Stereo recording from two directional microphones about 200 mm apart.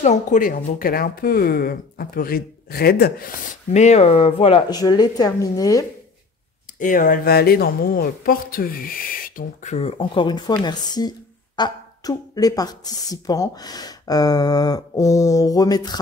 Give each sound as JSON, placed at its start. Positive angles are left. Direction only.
{"t": 0.0, "sound": "speech", "side_deg": 35}
{"t": 3.7, "sound": "speech", "side_deg": 35}
{"t": 6.8, "sound": "speech", "side_deg": 40}